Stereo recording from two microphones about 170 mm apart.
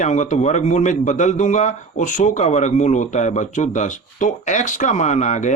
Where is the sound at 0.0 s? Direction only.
45° left (ahead or behind).